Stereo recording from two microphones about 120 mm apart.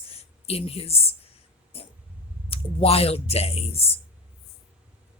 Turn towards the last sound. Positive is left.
turn(degrees=55)  # may be behind; listen again after turning